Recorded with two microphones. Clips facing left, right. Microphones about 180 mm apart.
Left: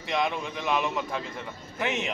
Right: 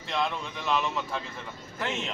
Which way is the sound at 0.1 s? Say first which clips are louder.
Left 2 dB; 15° left (ahead or behind).